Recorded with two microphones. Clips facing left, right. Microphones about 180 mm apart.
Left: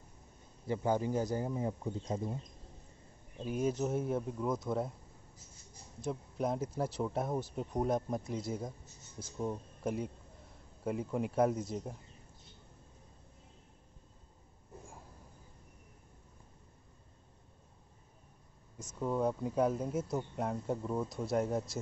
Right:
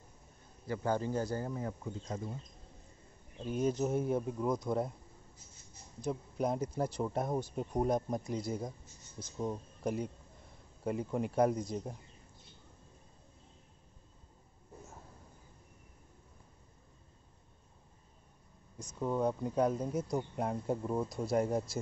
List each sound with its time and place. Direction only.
0.7 s speech: 15° left (ahead or behind)
3.4 s speech: 5° left (ahead or behind)
6.0 s speech: centre (ahead or behind)
18.8 s speech: centre (ahead or behind)